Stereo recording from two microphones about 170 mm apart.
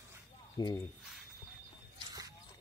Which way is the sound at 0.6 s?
25° left (ahead or behind).